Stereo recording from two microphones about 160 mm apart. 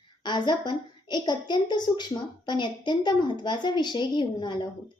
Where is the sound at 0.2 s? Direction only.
30° left (ahead or behind).